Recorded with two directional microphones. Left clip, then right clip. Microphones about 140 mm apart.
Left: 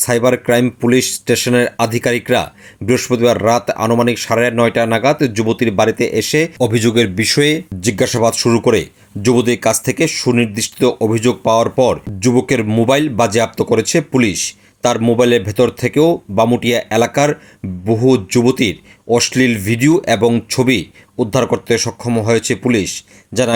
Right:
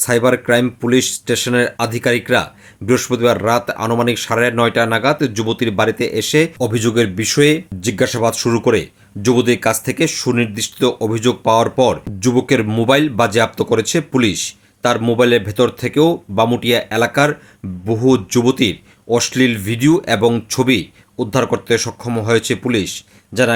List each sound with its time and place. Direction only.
0.0 s speech: 25° left (ahead or behind)